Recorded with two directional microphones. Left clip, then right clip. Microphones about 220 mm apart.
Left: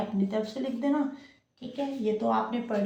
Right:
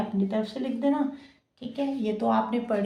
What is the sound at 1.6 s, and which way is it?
A woman's voice, 45° right (ahead or behind).